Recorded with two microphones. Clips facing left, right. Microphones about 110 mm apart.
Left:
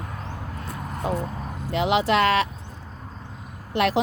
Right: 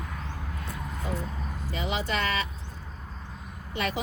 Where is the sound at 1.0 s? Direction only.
75° left (ahead or behind).